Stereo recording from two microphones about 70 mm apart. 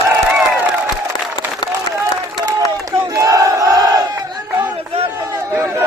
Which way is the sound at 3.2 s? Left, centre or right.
Right.